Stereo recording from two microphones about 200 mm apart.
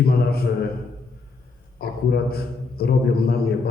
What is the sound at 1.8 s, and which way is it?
A man's voice, 50° left (ahead or behind).